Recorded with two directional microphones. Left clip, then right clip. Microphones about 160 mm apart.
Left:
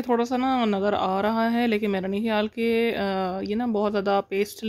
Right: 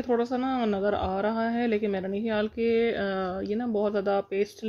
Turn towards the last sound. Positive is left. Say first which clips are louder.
# left 3 dB
turn(degrees=40)  # may be behind; listen again after turning